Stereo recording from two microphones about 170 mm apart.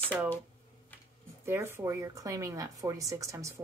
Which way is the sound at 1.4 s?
15° right (ahead or behind).